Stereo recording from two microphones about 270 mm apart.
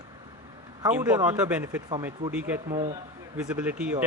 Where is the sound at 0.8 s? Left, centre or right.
Centre.